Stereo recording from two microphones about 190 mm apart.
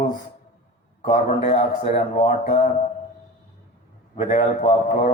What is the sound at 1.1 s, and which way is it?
Speech, 35° left (ahead or behind).